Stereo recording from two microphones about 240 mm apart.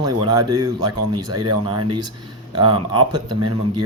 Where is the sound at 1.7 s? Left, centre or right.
Right.